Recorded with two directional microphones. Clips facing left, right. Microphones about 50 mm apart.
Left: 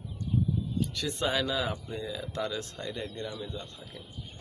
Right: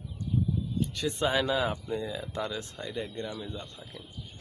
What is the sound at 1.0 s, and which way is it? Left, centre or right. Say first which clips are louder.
Speech: right 3 dB; right.